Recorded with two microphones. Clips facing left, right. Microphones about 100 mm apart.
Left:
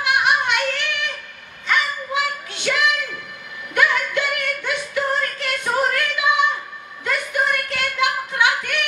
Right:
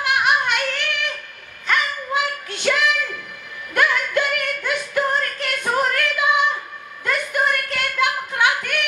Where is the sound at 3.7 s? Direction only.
45° right (ahead or behind).